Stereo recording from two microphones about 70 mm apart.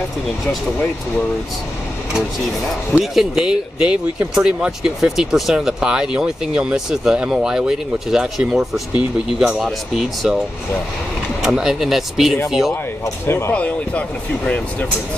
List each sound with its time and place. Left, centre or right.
2.9 s speech: centre
11.4 s speech: centre
13.0 s speech: left
13.5 s speech: left